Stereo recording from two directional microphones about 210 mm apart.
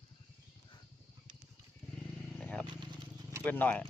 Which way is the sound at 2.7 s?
20° right (ahead or behind).